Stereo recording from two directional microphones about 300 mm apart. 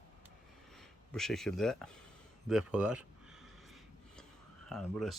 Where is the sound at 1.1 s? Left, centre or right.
Centre.